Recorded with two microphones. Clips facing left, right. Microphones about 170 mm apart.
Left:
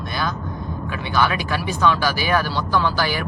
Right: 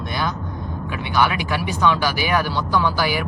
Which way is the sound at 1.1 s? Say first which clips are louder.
Right 1 dB; 15° right (ahead or behind).